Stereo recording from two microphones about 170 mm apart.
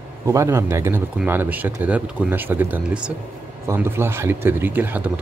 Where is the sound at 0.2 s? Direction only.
15° right (ahead or behind).